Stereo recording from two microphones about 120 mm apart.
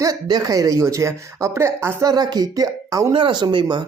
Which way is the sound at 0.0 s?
30° right (ahead or behind).